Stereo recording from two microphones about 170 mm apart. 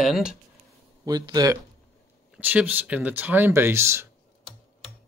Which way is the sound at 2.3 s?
10° right (ahead or behind).